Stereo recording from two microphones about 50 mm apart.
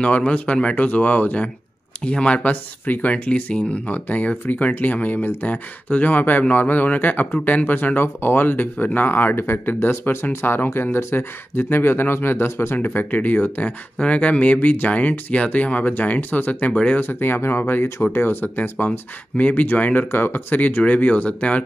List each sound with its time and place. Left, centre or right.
0.0 s speech: left
12.8 s speech: left
18.9 s speech: left